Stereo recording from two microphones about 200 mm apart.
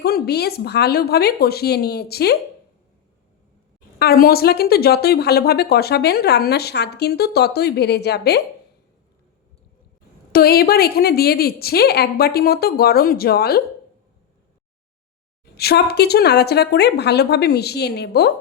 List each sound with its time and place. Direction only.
0.0 s a woman's voice: 50° left (ahead or behind)
3.9 s a woman's voice: 50° left (ahead or behind)
10.3 s a woman's voice: 50° left (ahead or behind)
15.5 s a woman's voice: 50° left (ahead or behind)